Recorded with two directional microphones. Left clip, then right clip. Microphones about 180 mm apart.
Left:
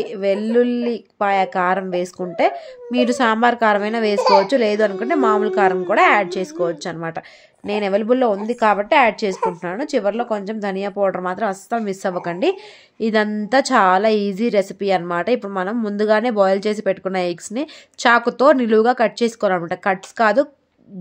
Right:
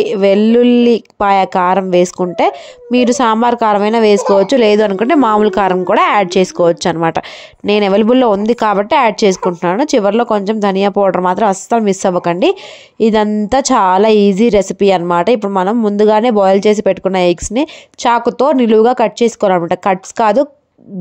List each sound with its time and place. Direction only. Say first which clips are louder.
0.0 s a woman's voice: right 10 dB; 40° right (ahead or behind)